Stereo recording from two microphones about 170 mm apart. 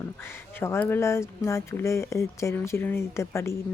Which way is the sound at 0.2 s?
15° left (ahead or behind).